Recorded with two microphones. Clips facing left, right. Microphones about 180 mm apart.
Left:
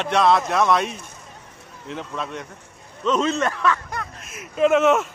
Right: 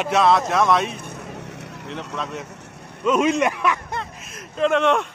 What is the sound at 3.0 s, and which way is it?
Speech, 10° right (ahead or behind).